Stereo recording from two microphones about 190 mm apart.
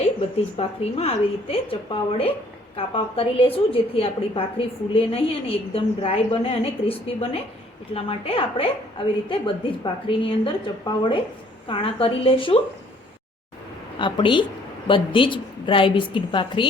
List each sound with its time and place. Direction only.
0.5 s a woman's voice: 30° left (ahead or behind)
14.0 s a woman's voice: 25° left (ahead or behind)